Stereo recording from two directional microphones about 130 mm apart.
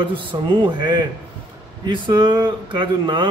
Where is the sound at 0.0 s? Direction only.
40° right (ahead or behind).